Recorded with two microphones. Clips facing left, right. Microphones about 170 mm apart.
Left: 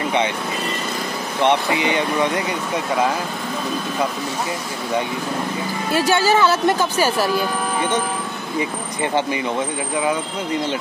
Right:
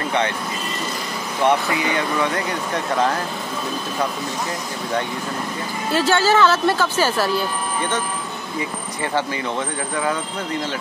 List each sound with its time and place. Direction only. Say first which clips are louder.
1.4 s speech: left 1 dB; 20° left (ahead or behind)
5.9 s speech: even; 10° left (ahead or behind)
8.5 s speech: left 4 dB; 20° left (ahead or behind)